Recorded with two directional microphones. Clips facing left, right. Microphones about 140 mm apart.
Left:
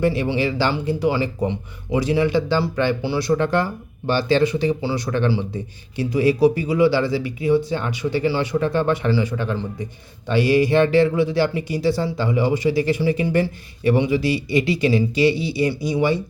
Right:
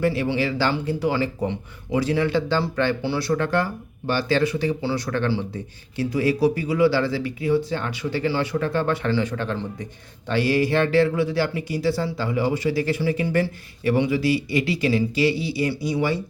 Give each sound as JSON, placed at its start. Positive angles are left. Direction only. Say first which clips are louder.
{"t": 0.0, "sound": "speech", "louder": "left 2 dB", "side_deg": 20}